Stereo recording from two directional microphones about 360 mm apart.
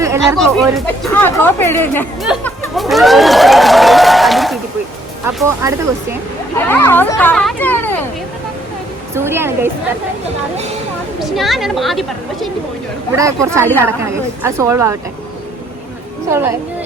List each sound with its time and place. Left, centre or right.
0.0 s speech: centre
9.1 s a woman's voice: centre
11.2 s a woman's voice: centre
16.3 s a woman's voice: centre